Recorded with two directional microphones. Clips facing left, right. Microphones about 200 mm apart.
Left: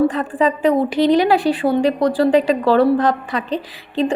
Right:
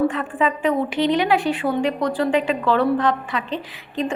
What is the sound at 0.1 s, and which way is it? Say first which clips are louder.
A woman's voice: left 4 dB; 35° left (ahead or behind).